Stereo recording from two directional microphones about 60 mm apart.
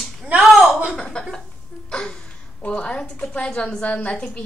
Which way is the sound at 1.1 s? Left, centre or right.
Centre.